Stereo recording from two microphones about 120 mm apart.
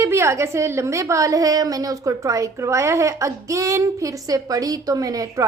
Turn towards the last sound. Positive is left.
turn(degrees=-30)  # may be behind; listen again after turning